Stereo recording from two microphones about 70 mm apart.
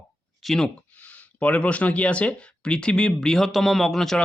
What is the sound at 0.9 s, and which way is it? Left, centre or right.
Speech, left.